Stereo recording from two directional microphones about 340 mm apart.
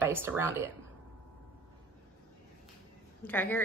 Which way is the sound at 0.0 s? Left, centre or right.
Centre.